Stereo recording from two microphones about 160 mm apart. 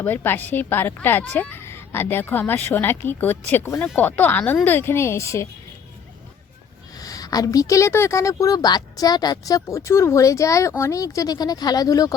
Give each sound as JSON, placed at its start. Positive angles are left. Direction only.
{"t": 0.0, "sound": "a woman's voice", "side_deg": 10}
{"t": 7.0, "sound": "speech", "side_deg": 20}